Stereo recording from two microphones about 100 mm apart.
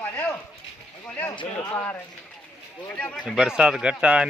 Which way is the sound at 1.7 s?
15° left (ahead or behind).